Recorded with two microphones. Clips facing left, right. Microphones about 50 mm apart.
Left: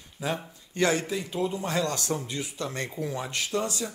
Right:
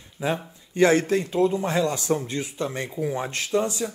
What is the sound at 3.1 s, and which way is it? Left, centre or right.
Speech, right.